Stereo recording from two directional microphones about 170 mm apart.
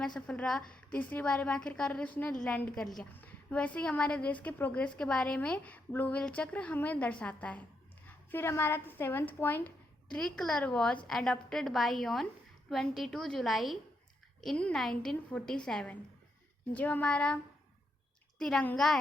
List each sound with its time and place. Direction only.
0.0 s a woman's voice: 5° left (ahead or behind)